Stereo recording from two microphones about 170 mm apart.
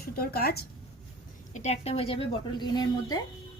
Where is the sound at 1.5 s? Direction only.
40° left (ahead or behind); by 3.2 s 25° left (ahead or behind).